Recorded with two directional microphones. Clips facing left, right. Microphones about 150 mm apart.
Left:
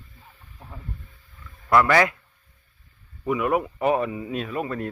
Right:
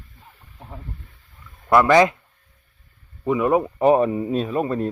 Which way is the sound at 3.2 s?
25° right (ahead or behind).